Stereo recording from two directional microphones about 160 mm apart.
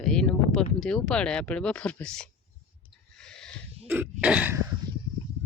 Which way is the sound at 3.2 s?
5° left (ahead or behind).